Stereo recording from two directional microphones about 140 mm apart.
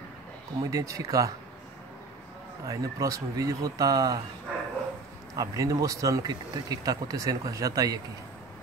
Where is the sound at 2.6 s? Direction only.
25° right (ahead or behind).